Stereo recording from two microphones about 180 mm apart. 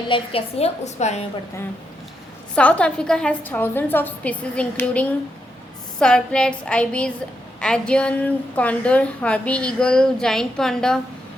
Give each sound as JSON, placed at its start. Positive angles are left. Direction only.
{"t": 0.1, "sound": "a woman's voice", "side_deg": 30}
{"t": 2.6, "sound": "a woman's voice", "side_deg": 5}